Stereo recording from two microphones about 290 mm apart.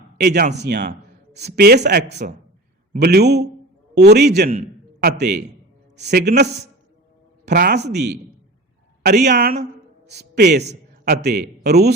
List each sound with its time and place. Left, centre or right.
0.2 s a man's voice: right